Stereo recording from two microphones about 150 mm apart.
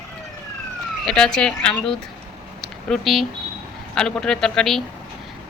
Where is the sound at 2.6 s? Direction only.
Centre (ahead or behind).